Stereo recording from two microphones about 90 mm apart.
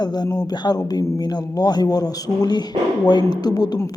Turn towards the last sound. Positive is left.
turn(degrees=45)  # may be behind; listen again after turning